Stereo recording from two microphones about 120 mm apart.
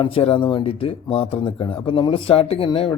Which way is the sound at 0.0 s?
50° left (ahead or behind).